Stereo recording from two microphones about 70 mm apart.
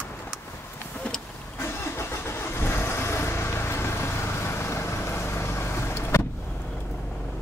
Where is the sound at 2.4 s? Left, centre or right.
Left.